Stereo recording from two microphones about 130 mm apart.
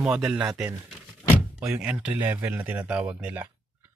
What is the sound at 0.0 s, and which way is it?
Speech, 5° right (ahead or behind).